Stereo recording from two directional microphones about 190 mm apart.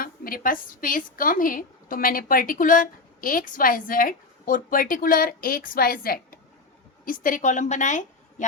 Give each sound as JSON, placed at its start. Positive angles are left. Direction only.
{"t": 0.0, "sound": "a woman's voice", "side_deg": 50}